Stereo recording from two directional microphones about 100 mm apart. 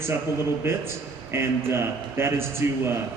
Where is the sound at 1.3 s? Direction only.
25° right (ahead or behind).